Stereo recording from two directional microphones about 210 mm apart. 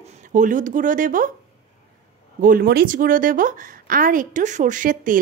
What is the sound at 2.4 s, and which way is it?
A woman's voice, 40° right (ahead or behind).